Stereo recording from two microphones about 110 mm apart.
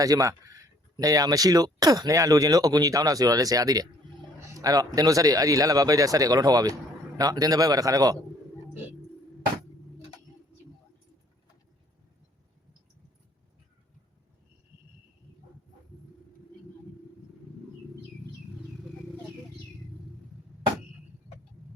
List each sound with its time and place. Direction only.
0.0 s speech: 30° right (ahead or behind)